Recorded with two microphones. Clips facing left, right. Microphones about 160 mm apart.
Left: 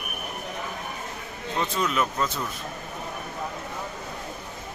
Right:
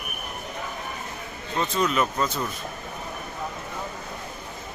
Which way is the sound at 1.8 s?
Centre (ahead or behind).